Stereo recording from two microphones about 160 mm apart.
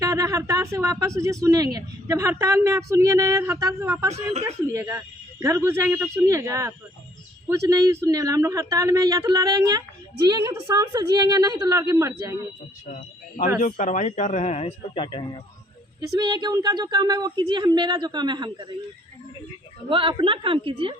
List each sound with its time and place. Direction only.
0.0 s speech: 20° right (ahead or behind)
12.9 s a man's voice: 55° left (ahead or behind); by 15.4 s 30° left (ahead or behind)
16.1 s speech: 25° right (ahead or behind)
19.9 s a woman's voice: 30° right (ahead or behind)